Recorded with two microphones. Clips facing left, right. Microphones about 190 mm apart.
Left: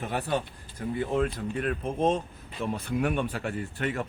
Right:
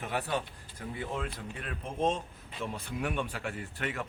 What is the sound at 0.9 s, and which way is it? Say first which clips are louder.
Speech: left 10 dB; 55° left (ahead or behind).